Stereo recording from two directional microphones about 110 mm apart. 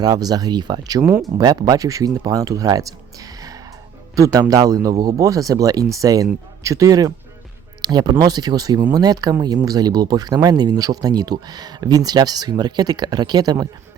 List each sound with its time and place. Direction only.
0.0 s speech: 35° right (ahead or behind)